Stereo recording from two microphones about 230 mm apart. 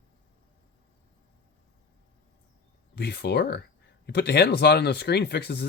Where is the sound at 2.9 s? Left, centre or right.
Left.